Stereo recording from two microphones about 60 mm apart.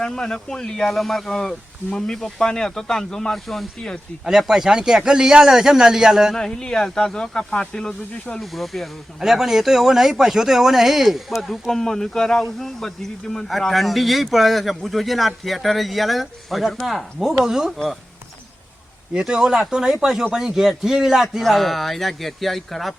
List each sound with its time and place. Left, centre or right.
0.0 s speech: centre
4.3 s speech: centre
6.3 s speech: centre
8.5 s speech: centre
11.7 s speech: centre
19.1 s speech: centre